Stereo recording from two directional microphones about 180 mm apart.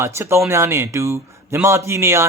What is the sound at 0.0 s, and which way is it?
A man's voice, 15° right (ahead or behind).